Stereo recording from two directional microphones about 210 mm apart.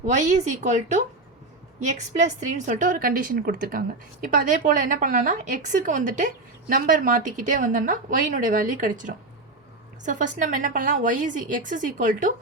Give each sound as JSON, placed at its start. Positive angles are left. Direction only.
{"t": 0.0, "sound": "a woman's voice", "side_deg": -35}